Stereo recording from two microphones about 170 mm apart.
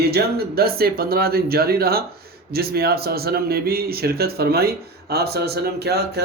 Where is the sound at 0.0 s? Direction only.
65° right (ahead or behind).